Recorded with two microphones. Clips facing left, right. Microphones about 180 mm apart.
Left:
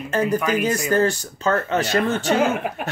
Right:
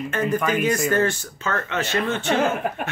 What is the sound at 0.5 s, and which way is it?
Speech, 35° left (ahead or behind).